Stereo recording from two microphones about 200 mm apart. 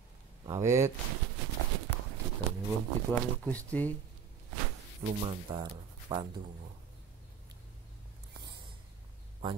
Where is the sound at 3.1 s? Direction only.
5° left (ahead or behind).